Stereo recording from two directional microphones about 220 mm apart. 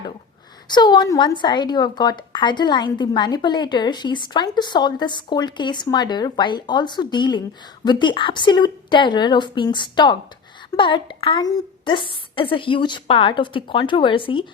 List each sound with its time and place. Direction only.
0.7 s a woman's voice: 20° left (ahead or behind)